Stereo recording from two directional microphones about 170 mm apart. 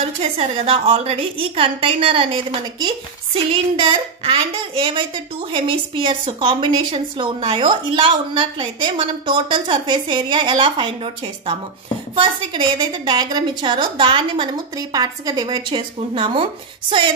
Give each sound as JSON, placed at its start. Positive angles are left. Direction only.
{"t": 0.0, "sound": "a woman's voice", "side_deg": -35}
{"t": 12.2, "sound": "a woman's voice", "side_deg": -30}